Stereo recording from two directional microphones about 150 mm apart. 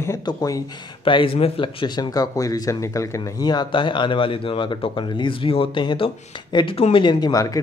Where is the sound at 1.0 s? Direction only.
35° left (ahead or behind).